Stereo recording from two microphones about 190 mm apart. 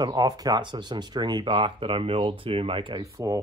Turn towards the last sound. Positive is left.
turn(degrees=-15)  # may be behind; listen again after turning